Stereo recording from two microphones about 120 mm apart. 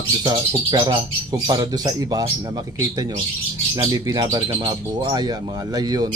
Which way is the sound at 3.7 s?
30° right (ahead or behind).